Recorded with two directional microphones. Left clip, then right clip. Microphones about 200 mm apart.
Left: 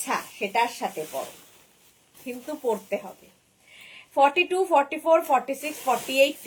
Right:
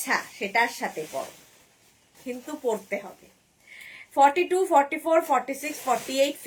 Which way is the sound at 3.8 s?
15° right (ahead or behind).